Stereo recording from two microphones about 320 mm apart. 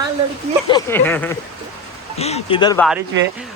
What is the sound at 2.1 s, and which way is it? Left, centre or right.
Speech, centre.